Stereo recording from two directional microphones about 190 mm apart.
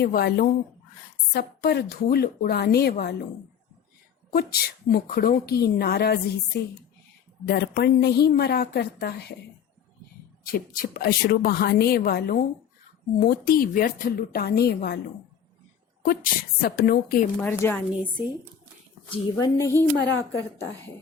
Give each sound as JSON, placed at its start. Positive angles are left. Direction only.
{"t": 0.0, "sound": "a woman's voice", "side_deg": 55}
{"t": 4.5, "sound": "speech", "side_deg": 55}
{"t": 10.4, "sound": "a woman's voice", "side_deg": 50}
{"t": 16.0, "sound": "a woman's voice", "side_deg": 50}
{"t": 17.4, "sound": "a woman's voice", "side_deg": 10}
{"t": 19.1, "sound": "a woman's voice", "side_deg": 20}
{"t": 20.0, "sound": "a woman's voice", "side_deg": 80}